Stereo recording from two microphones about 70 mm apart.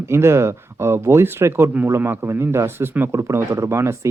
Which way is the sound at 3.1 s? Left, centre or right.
Right.